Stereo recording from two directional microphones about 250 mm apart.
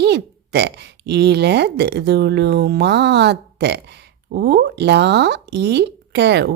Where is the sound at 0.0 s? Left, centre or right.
Right.